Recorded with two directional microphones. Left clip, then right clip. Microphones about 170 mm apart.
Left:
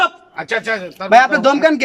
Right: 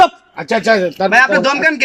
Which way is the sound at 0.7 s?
45° right (ahead or behind).